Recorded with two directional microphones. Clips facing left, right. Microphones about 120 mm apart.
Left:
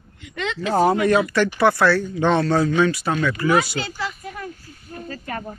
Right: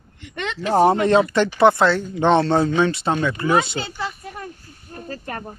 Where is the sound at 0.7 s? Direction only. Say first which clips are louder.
Right 2 dB; 25° right (ahead or behind).